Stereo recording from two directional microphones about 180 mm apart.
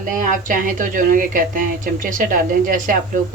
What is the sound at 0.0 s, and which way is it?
Speech, 45° right (ahead or behind).